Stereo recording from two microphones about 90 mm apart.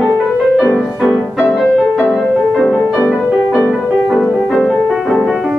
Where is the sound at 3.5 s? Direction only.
5° right (ahead or behind).